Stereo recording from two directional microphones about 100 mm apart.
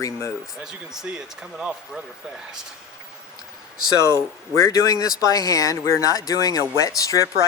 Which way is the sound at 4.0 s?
30° left (ahead or behind).